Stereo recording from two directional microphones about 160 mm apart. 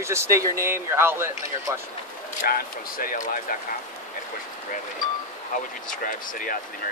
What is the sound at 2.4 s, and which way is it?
Speech, 65° left (ahead or behind).